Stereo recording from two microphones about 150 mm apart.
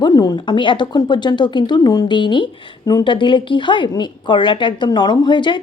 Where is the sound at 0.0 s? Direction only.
25° left (ahead or behind).